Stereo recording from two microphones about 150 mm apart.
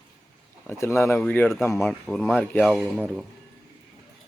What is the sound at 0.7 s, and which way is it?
Speech, 15° left (ahead or behind).